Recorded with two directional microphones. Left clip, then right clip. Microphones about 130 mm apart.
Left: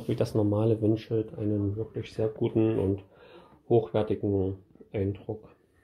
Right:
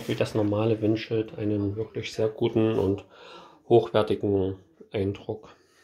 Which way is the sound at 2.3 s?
5° right (ahead or behind).